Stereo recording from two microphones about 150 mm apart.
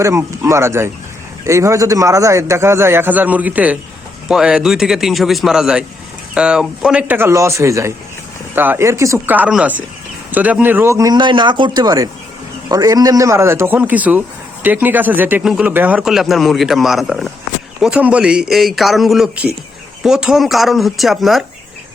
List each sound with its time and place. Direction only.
0.0 s a man's voice: 20° right (ahead or behind); by 21.4 s centre (ahead or behind)